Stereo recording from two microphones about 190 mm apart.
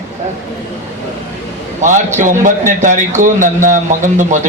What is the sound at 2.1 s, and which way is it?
A man's voice, 40° right (ahead or behind).